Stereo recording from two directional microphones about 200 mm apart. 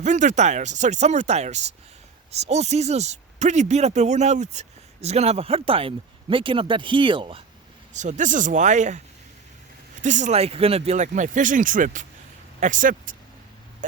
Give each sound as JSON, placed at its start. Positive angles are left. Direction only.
{"t": 0.0, "sound": "speech", "side_deg": -35}
{"t": 7.9, "sound": "speech", "side_deg": -35}
{"t": 10.0, "sound": "speech", "side_deg": -40}